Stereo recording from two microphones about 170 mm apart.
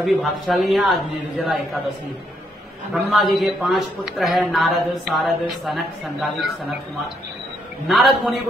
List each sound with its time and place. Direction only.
0.0 s speech: centre (ahead or behind)
2.9 s speech: centre (ahead or behind)
7.9 s speech: centre (ahead or behind)